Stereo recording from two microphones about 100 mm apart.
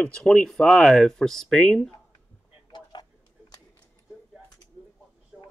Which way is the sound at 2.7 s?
50° left (ahead or behind).